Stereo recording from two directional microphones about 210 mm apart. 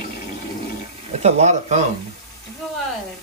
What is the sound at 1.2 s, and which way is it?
Speech, 30° right (ahead or behind).